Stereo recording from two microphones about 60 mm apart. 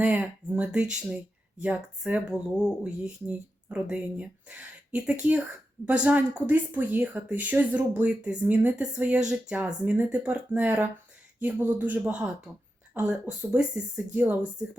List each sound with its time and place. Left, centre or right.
0.0 s speech: right
1.6 s speech: right
2.3 s speech: centre
9.8 s speech: right